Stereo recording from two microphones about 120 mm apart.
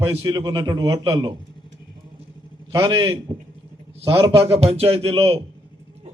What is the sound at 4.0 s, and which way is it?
A man's voice, 45° right (ahead or behind).